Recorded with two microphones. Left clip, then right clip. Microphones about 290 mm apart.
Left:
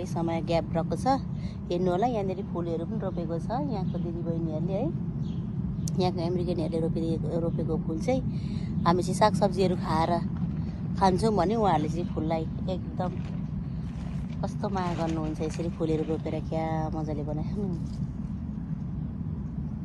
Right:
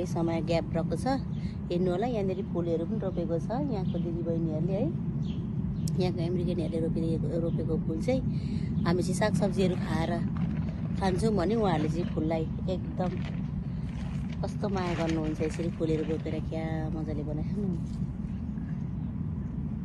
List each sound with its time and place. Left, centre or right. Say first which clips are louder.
0.2 s speech: left 2 dB; centre
5.9 s speech: left 3 dB; centre
14.6 s speech: left 1 dB; centre